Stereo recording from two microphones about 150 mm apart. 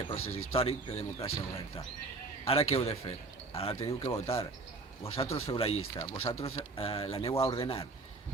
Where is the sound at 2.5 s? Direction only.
40° left (ahead or behind).